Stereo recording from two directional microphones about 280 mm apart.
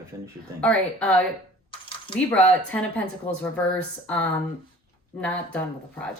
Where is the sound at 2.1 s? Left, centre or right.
Centre.